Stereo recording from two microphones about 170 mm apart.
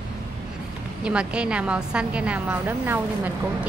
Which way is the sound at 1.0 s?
5° right (ahead or behind).